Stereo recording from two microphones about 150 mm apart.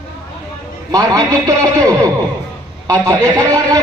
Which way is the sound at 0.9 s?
20° right (ahead or behind).